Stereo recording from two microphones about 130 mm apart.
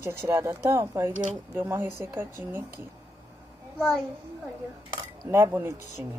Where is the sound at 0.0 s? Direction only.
20° right (ahead or behind).